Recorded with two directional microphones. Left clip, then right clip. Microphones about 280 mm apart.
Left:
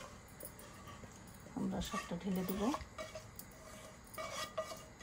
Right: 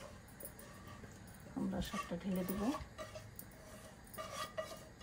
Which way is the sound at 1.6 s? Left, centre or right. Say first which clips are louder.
Even; left.